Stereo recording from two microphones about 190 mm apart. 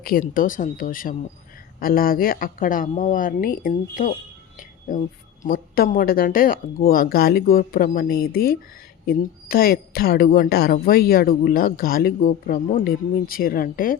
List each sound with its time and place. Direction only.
0.3 s a woman's voice: 45° left (ahead or behind)